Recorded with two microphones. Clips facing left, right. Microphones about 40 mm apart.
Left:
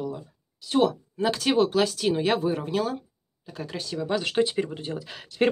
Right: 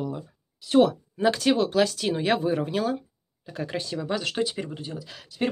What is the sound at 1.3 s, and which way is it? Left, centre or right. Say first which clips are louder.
Speech: left 2 dB; centre.